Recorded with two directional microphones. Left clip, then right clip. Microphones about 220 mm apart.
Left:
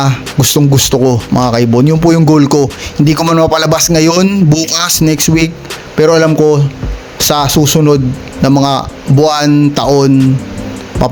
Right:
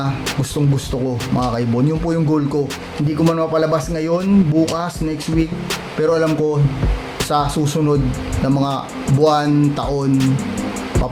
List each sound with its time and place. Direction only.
0.0 s a man's voice: 40° left (ahead or behind)